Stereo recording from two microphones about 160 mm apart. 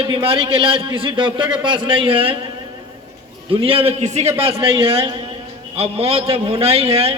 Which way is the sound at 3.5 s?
35° right (ahead or behind).